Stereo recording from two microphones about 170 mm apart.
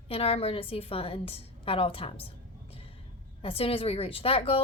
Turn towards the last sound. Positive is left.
turn(degrees=35)  # may be behind; listen again after turning